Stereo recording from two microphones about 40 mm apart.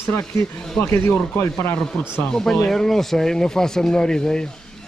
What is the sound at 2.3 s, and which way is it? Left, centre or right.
A man's voice, centre.